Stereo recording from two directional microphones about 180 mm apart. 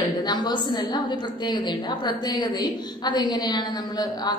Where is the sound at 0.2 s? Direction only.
25° left (ahead or behind).